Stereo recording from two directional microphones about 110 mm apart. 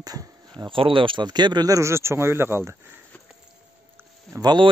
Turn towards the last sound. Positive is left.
turn(degrees=-40)  # may be behind; listen again after turning